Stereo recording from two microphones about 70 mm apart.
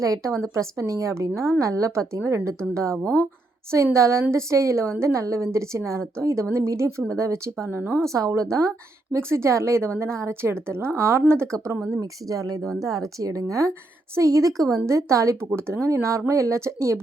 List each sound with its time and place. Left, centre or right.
0.0 s a woman's voice: right
3.0 s speech: centre
3.9 s a woman's voice: right
11.9 s a woman's voice: right
15.5 s a woman's voice: right